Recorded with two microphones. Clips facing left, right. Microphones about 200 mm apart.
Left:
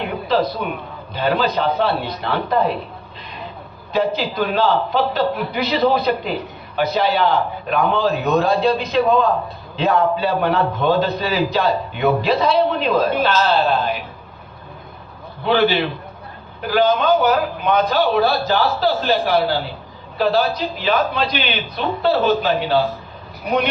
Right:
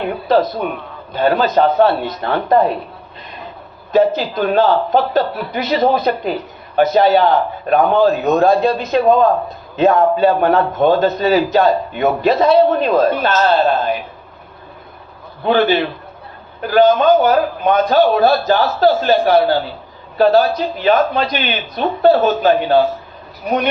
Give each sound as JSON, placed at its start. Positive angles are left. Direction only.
{"t": 1.1, "sound": "a man's voice", "side_deg": -50}
{"t": 3.9, "sound": "a man's voice", "side_deg": -50}
{"t": 15.4, "sound": "a man's voice", "side_deg": -50}